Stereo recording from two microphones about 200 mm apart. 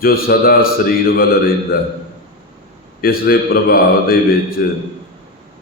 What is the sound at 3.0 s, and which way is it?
Mantra, 50° left (ahead or behind).